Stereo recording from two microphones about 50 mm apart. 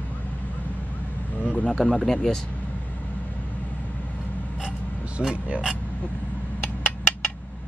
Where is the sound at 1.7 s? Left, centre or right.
Centre.